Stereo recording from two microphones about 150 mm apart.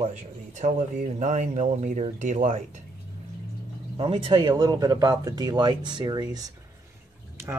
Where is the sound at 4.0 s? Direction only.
40° right (ahead or behind).